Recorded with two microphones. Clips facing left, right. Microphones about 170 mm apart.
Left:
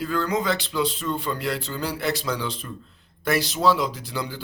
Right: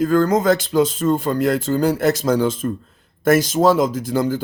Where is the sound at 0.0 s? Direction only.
45° right (ahead or behind).